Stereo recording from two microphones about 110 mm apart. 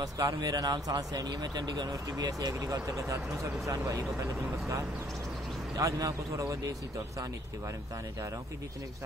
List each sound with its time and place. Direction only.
0.0 s speech: 35° right (ahead or behind)